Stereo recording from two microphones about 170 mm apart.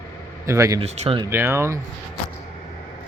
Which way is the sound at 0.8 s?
35° right (ahead or behind).